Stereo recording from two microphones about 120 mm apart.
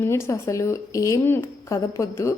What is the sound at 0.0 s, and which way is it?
Speech, 20° left (ahead or behind).